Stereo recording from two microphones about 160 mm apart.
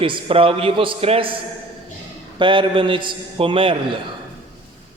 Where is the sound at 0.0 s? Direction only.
35° right (ahead or behind).